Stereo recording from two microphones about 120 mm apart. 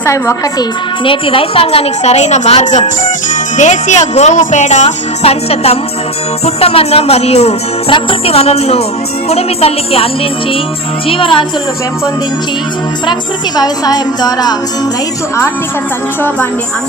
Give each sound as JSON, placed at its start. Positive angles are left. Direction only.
{"t": 0.0, "sound": "a woman's voice", "side_deg": 25}
{"t": 1.0, "sound": "a woman's voice", "side_deg": 45}
{"t": 3.6, "sound": "a woman's voice", "side_deg": 85}
{"t": 11.1, "sound": "speech", "side_deg": 45}
{"t": 13.6, "sound": "music", "side_deg": 35}